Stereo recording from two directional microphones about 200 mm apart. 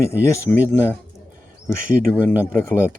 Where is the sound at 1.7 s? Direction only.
45° right (ahead or behind).